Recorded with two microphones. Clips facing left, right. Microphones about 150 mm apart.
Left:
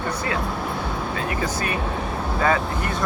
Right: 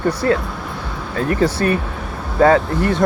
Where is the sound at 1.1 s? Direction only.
50° right (ahead or behind).